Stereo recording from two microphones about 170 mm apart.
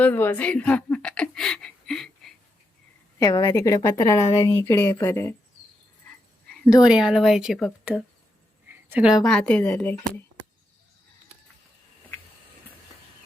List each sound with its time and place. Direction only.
0.0 s a sound: 10° left (ahead or behind)
3.2 s a woman's voice: 25° left (ahead or behind)
6.8 s speech: 5° right (ahead or behind)